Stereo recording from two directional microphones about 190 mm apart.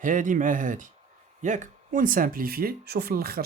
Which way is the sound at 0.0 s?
45° right (ahead or behind).